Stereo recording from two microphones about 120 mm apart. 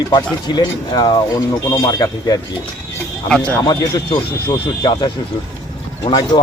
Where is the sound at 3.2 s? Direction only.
5° left (ahead or behind).